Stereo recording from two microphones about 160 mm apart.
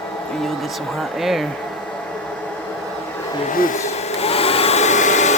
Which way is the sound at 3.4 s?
55° left (ahead or behind).